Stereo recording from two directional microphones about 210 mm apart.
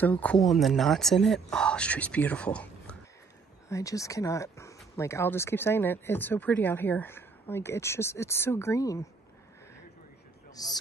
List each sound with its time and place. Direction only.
0.0 s speech: 5° left (ahead or behind)
10.5 s speech: 20° left (ahead or behind)